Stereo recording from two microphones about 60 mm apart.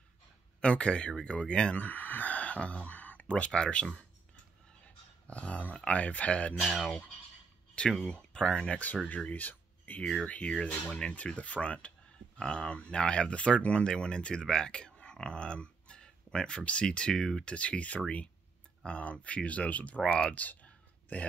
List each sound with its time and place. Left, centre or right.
0.6 s speech: centre
4.8 s dog: left
5.9 s speech: left
8.0 s speech: centre
17.6 s speech: left
20.2 s a sound: left